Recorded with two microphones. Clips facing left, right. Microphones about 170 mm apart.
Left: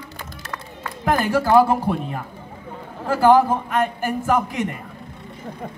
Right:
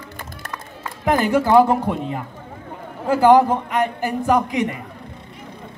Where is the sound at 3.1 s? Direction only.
15° right (ahead or behind).